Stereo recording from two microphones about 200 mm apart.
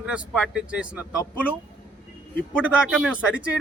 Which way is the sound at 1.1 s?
10° left (ahead or behind).